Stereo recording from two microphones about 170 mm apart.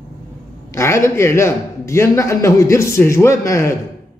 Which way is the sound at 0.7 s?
15° left (ahead or behind).